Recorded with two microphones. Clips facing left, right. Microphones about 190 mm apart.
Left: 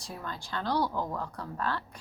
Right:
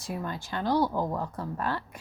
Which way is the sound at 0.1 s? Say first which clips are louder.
Right 5 dB; 15° right (ahead or behind).